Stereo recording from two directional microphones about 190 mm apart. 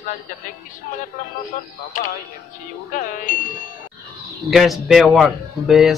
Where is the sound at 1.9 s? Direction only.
45° left (ahead or behind).